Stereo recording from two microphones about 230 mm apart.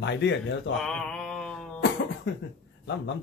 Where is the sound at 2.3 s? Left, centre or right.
Left.